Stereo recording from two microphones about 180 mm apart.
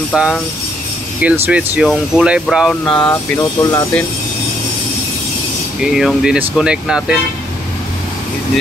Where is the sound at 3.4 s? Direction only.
20° left (ahead or behind).